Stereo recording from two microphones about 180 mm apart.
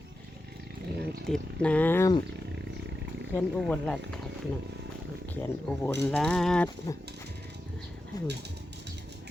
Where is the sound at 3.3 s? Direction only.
5° left (ahead or behind).